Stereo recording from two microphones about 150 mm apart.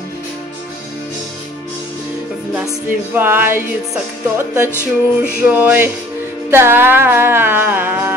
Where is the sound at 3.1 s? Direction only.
15° right (ahead or behind).